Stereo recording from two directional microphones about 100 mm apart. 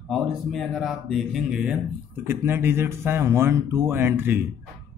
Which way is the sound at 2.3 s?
20° right (ahead or behind).